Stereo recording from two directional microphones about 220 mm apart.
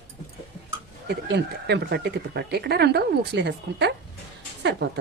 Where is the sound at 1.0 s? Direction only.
50° right (ahead or behind).